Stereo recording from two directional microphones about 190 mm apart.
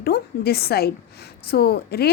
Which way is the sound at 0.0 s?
55° left (ahead or behind).